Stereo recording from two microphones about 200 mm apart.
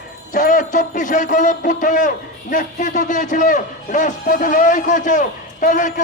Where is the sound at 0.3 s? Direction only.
40° left (ahead or behind).